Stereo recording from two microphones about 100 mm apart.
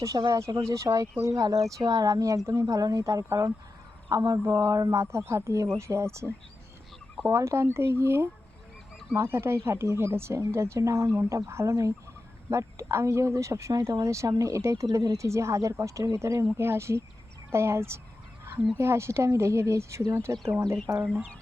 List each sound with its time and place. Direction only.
0.3 s speech: 30° right (ahead or behind)